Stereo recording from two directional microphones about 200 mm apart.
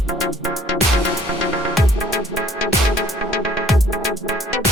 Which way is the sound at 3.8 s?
Centre (ahead or behind).